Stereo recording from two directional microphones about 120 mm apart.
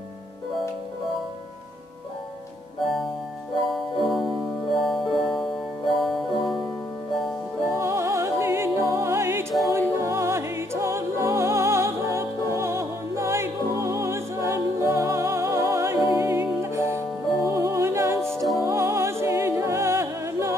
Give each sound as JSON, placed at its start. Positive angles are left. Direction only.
{"t": 3.7, "sound": "music", "side_deg": 0}
{"t": 7.7, "sound": "music", "side_deg": -25}